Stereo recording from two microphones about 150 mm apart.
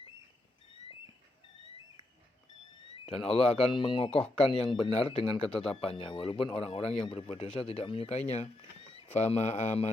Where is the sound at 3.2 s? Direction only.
40° left (ahead or behind).